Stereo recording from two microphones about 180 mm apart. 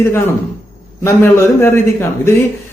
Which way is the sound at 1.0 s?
15° left (ahead or behind).